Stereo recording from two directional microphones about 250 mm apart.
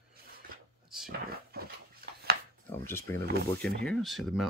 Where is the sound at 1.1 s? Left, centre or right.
Right.